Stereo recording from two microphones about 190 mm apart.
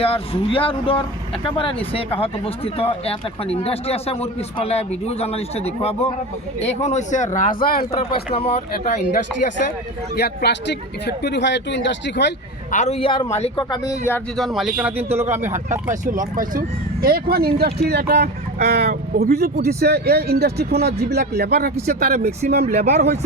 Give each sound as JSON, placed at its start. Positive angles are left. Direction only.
{"t": 0.0, "sound": "speech", "side_deg": 30}
{"t": 8.1, "sound": "speech", "side_deg": 30}
{"t": 8.8, "sound": "speech", "side_deg": 40}
{"t": 10.2, "sound": "speech", "side_deg": 60}
{"t": 12.7, "sound": "speech", "side_deg": 35}
{"t": 14.3, "sound": "a man's voice", "side_deg": 0}
{"t": 15.5, "sound": "speech", "side_deg": -40}
{"t": 22.1, "sound": "speech", "side_deg": -35}